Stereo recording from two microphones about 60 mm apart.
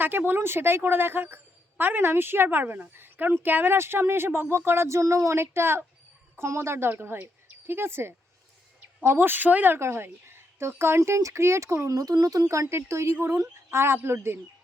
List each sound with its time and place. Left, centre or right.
0.0 s a woman's voice: right
9.7 s a woman's voice: right
11.9 s a woman's voice: right